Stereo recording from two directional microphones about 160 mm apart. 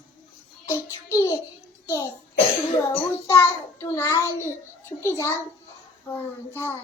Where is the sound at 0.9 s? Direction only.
20° left (ahead or behind).